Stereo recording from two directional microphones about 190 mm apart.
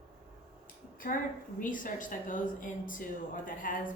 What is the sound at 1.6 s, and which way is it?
A woman's voice, 45° left (ahead or behind).